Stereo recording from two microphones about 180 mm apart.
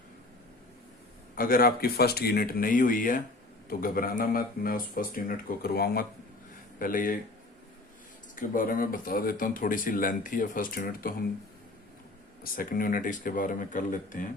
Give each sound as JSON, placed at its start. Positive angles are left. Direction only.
{"t": 1.4, "sound": "speech", "side_deg": 55}
{"t": 8.4, "sound": "speech", "side_deg": 50}
{"t": 12.4, "sound": "speech", "side_deg": 50}